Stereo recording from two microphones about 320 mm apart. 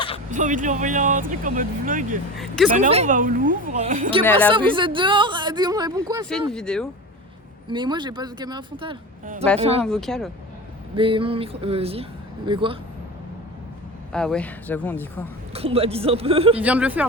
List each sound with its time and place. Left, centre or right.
0.3 s speech: right
6.5 s speech: centre
7.7 s speech: centre
9.8 s speech: centre
10.9 s speech: centre
14.1 s speech: centre
15.5 s speech: centre
16.6 s speech: centre